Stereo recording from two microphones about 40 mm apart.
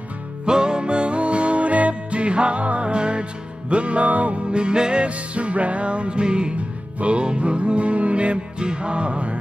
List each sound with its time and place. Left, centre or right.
0.5 s music: centre